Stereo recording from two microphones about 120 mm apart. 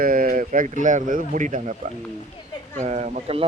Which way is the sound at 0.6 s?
90° right.